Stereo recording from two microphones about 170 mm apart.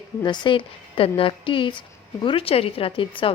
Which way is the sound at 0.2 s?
25° left (ahead or behind).